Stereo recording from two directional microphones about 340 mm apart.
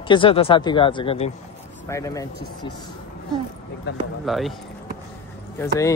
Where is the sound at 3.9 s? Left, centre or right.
Left.